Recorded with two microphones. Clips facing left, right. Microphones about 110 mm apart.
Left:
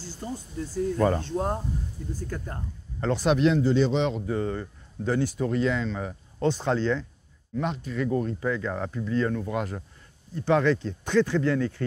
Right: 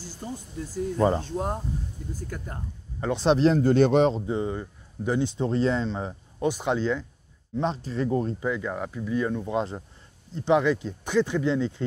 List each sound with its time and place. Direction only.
0.0 s a sound: 15° right (ahead or behind)
0.7 s speech: 20° right (ahead or behind)
3.3 s speech: 35° right (ahead or behind)
3.6 s a man's voice: 55° right (ahead or behind)
4.3 s speech: 15° right (ahead or behind)
6.4 s speech: 15° right (ahead or behind)
7.5 s speech: 30° right (ahead or behind)
8.4 s speech: 15° right (ahead or behind)